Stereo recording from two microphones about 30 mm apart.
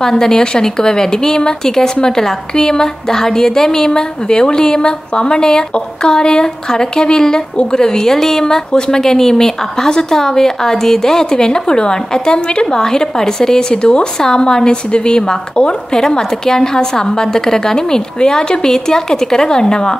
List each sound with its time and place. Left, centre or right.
0.0 s a woman's voice: centre
4.3 s a woman's voice: left